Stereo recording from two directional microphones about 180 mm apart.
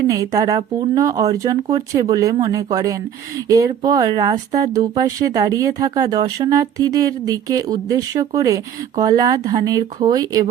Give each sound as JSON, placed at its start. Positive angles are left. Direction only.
{"t": 0.1, "sound": "speech", "side_deg": -20}